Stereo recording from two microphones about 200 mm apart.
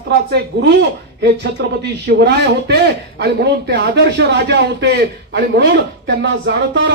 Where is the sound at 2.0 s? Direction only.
55° right (ahead or behind).